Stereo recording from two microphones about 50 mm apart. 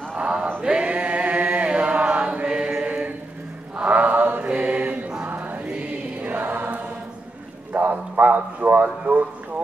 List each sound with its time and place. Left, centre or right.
0.1 s a sound: right
0.6 s chant: centre
3.7 s mantra: right
4.5 s mantra: right
5.2 s music: right
6.2 s choir: right
7.7 s a sound: right